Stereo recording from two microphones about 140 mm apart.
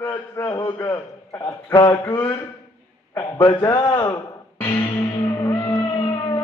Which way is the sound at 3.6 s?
25° left (ahead or behind).